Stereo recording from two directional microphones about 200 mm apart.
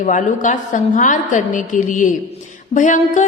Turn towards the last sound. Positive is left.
turn(degrees=40)  # may be behind; listen again after turning